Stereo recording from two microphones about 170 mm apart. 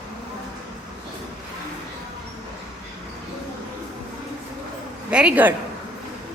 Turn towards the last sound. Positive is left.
turn(degrees=-10)  # may be behind; listen again after turning